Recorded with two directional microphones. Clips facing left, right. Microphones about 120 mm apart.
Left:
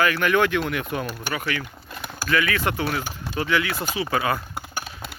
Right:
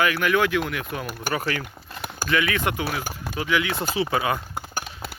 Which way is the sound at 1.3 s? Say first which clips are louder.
Right 4 dB; 35° right (ahead or behind).